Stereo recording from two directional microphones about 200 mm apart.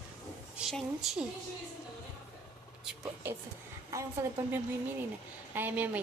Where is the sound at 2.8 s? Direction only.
10° right (ahead or behind).